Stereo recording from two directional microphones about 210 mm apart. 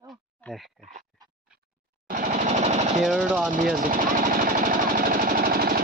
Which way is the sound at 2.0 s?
40° right (ahead or behind).